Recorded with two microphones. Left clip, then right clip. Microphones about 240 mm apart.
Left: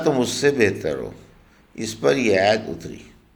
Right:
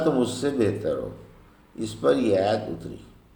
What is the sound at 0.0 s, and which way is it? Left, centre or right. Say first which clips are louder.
Speech: left 5 dB; left.